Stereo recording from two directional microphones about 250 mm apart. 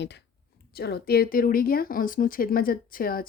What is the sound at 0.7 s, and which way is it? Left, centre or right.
A woman's voice, left.